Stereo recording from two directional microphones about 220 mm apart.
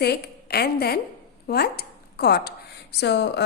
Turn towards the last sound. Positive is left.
turn(degrees=50)  # may be behind; listen again after turning